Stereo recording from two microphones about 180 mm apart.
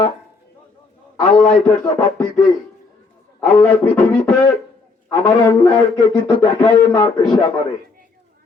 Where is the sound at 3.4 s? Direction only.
10° left (ahead or behind).